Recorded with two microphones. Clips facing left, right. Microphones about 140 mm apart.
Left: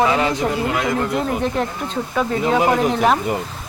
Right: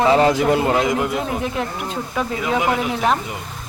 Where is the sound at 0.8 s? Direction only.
15° right (ahead or behind).